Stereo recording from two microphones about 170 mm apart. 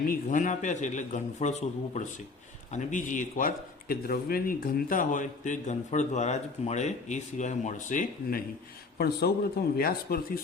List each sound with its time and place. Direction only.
0.1 s a man's voice: 50° left (ahead or behind)
9.0 s a man's voice: 70° left (ahead or behind)
9.7 s speech: 60° left (ahead or behind)